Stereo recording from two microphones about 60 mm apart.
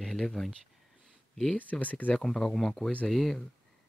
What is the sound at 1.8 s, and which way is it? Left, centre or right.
Speech, left.